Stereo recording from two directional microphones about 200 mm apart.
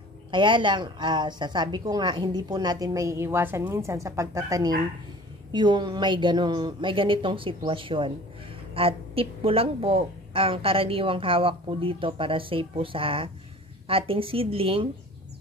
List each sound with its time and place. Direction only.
0.3 s a woman's voice: 25° right (ahead or behind)